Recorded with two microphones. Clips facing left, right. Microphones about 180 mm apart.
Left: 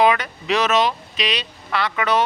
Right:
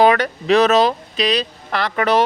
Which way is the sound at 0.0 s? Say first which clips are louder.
Right 4 dB; 40° right (ahead or behind).